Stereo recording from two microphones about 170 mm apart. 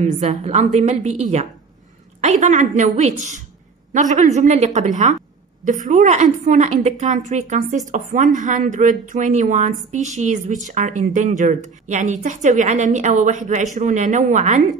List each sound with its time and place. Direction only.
0.0 s a woman's voice: 40° right (ahead or behind)